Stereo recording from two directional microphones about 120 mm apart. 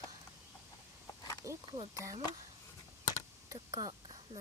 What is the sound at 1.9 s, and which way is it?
Speech, 25° right (ahead or behind).